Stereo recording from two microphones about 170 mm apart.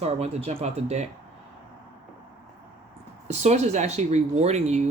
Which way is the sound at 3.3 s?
40° right (ahead or behind).